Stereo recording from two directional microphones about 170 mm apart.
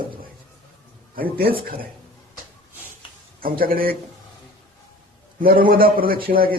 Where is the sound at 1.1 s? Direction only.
60° right (ahead or behind).